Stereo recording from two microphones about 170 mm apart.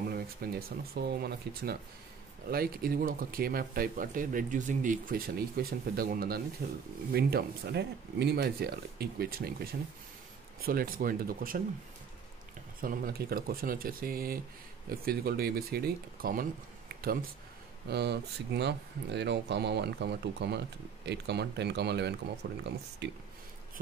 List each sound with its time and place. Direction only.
0.1 s speech: 65° right (ahead or behind)
12.8 s speech: 60° right (ahead or behind)
17.8 s speech: 80° right
22.4 s speech: 65° right (ahead or behind)
23.0 s speech: 80° right